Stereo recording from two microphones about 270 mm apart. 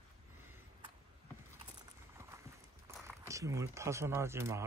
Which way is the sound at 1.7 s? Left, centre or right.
Centre.